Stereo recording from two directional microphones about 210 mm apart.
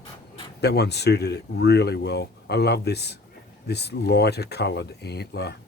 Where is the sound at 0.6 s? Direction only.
50° left (ahead or behind).